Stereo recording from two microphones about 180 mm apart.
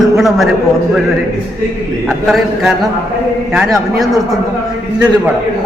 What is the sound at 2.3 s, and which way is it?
A woman's voice, centre (ahead or behind).